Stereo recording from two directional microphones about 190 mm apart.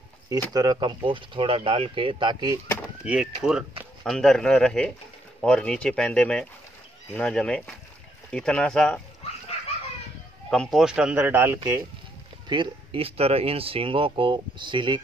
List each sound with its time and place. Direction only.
0.5 s speech: 20° right (ahead or behind)
3.1 s speech: 5° right (ahead or behind)
10.5 s speech: centre (ahead or behind)
12.4 s speech: 25° right (ahead or behind)